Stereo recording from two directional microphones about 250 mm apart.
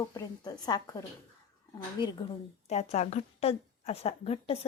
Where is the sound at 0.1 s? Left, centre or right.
Centre.